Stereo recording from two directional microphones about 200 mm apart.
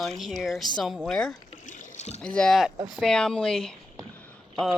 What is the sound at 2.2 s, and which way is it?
Speech, 5° left (ahead or behind).